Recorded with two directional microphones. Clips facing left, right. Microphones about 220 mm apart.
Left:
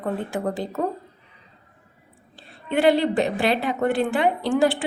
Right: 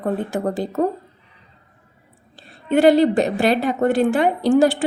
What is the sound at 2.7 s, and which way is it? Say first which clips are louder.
A woman's voice: right 5 dB; 40° right (ahead or behind).